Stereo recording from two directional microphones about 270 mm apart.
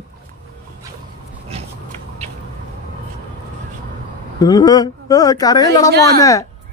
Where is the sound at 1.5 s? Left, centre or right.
Right.